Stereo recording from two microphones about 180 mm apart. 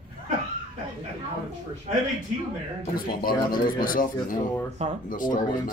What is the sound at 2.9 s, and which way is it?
Speech, 55° left (ahead or behind).